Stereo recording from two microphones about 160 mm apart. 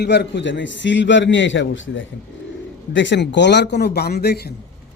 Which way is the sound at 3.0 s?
90° left.